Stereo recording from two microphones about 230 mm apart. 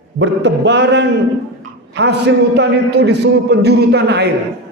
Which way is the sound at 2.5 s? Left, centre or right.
Right.